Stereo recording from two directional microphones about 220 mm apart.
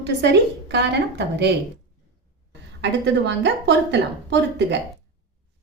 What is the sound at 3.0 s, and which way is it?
A woman's voice, 55° right (ahead or behind).